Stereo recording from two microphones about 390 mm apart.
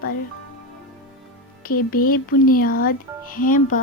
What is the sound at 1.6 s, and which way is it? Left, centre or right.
Speech, left.